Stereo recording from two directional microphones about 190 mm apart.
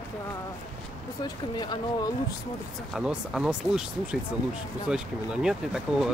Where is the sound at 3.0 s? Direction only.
5° right (ahead or behind).